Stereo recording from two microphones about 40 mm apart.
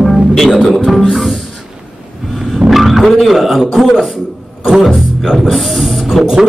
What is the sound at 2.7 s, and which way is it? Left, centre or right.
Speech, centre.